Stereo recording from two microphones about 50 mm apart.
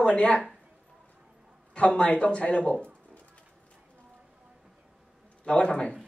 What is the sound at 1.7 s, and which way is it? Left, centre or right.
Speech, left.